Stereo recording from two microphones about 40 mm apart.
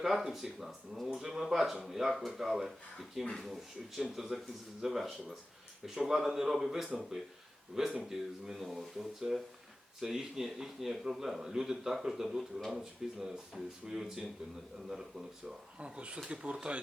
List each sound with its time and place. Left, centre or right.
0.0 s speech: centre
14.8 s speech: centre
15.8 s speech: right